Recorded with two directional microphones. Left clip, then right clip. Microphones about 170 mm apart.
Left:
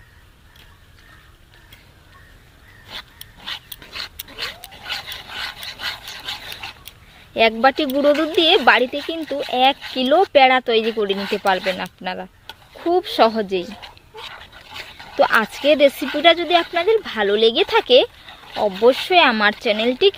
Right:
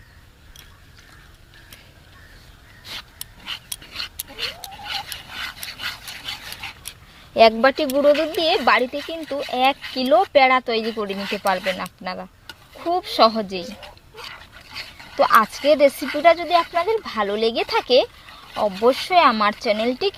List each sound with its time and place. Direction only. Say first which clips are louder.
3.4 s dog: left 1 dB; 30° left (ahead or behind)
4.9 s rub: left 2 dB; 25° left (ahead or behind)
7.3 s speech: right 1 dB; centre (ahead or behind)
7.9 s speech: left 1 dB; 25° left (ahead or behind)